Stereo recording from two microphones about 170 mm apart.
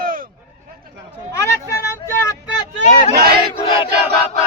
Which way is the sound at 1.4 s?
15° left (ahead or behind).